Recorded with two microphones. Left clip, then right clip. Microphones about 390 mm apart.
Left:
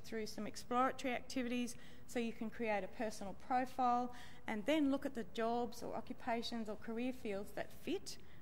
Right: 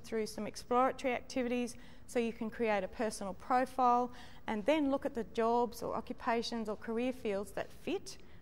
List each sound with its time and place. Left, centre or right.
0.1 s speech: right